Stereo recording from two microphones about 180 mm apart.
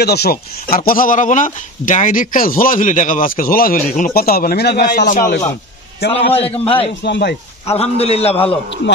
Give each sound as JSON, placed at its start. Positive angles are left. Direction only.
{"t": 0.0, "sound": "a man's voice", "side_deg": 60}
{"t": 6.3, "sound": "a man's voice", "side_deg": 35}
{"t": 7.0, "sound": "speech", "side_deg": 70}
{"t": 7.6, "sound": "a man's voice", "side_deg": 35}